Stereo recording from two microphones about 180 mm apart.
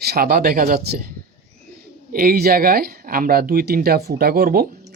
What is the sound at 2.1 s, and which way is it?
Speech, 55° right (ahead or behind).